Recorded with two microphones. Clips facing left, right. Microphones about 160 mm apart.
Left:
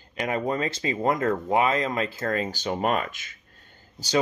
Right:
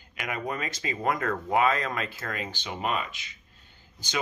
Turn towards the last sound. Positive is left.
turn(degrees=35)  # may be behind; listen again after turning